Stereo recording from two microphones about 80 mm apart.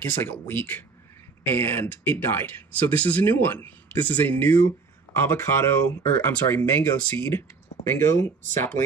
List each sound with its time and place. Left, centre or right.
0.0 s speech: left